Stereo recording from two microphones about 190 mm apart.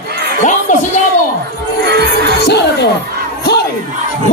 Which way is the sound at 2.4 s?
60° left (ahead or behind).